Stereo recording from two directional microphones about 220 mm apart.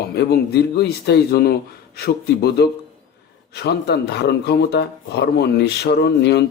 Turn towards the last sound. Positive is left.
turn(degrees=50)  # may be behind; listen again after turning